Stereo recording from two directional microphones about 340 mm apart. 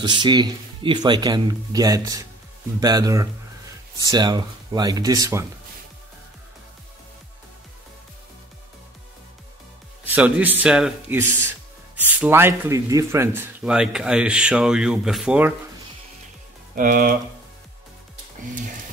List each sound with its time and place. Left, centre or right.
0.0 s speech: centre
10.0 s speech: centre
16.7 s speech: right